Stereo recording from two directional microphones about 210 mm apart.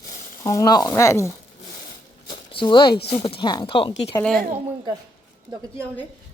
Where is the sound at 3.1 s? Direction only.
25° left (ahead or behind).